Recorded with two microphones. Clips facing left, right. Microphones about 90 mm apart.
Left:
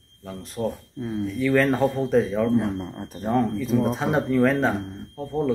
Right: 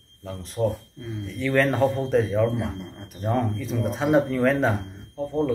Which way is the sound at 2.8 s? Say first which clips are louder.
Left 5 dB; 35° left (ahead or behind).